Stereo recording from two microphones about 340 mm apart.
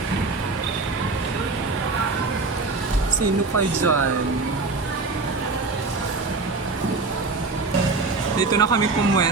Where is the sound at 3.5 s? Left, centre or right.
Right.